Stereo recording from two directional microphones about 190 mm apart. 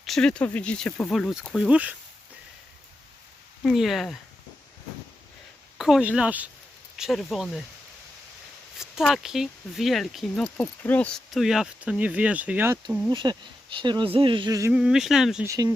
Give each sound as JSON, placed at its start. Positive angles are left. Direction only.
{"t": 0.0, "sound": "speech", "side_deg": 0}
{"t": 3.6, "sound": "speech", "side_deg": 0}
{"t": 5.7, "sound": "speech", "side_deg": 0}
{"t": 8.8, "sound": "speech", "side_deg": 0}
{"t": 13.1, "sound": "speech", "side_deg": -25}
{"t": 14.7, "sound": "speech", "side_deg": -5}
{"t": 15.4, "sound": "speech", "side_deg": -20}